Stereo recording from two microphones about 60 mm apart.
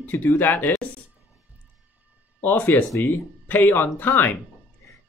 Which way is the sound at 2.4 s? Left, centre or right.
Left.